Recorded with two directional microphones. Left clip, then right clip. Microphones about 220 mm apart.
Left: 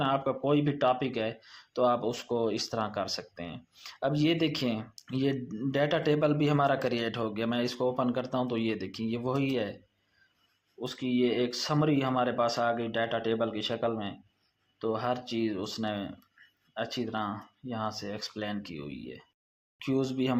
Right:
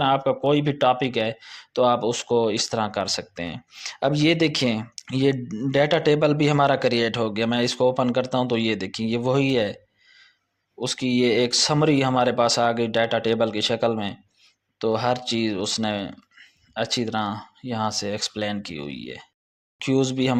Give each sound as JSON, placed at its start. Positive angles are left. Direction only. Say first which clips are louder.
{"t": 0.0, "sound": "speech", "louder": "right 8 dB", "side_deg": -35}